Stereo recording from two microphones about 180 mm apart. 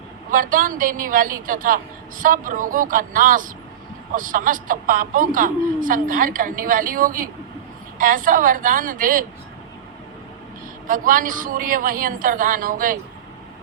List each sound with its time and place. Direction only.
0.3 s a woman's voice: 50° right (ahead or behind)
10.8 s a woman's voice: 50° right (ahead or behind)